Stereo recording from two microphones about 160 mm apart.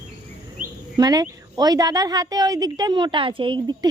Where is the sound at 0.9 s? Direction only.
25° right (ahead or behind).